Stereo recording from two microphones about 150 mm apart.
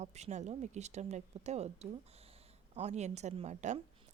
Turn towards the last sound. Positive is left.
turn(degrees=-50)  # may be behind; listen again after turning